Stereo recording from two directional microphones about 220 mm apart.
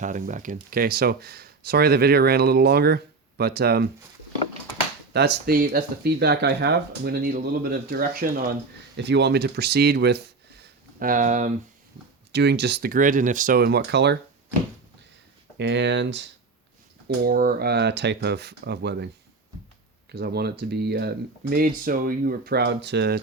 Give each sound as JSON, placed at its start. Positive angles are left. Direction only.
{"t": 0.0, "sound": "speech", "side_deg": -35}
{"t": 5.1, "sound": "speech", "side_deg": -50}
{"t": 10.6, "sound": "a sound", "side_deg": -40}
{"t": 12.3, "sound": "speech", "side_deg": -50}
{"t": 15.5, "sound": "speech", "side_deg": -50}
{"t": 17.2, "sound": "speech", "side_deg": -40}